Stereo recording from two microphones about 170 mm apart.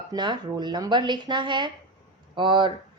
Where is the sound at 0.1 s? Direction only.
25° right (ahead or behind).